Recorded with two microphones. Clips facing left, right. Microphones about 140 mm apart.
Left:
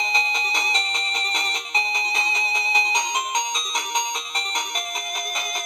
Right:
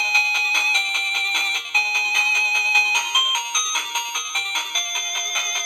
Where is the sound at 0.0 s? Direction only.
35° left (ahead or behind).